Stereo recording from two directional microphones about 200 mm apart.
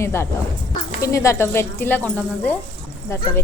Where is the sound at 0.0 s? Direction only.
15° left (ahead or behind).